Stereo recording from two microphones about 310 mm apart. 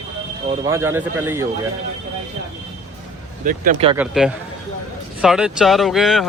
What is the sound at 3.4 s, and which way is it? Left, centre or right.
Speech, right.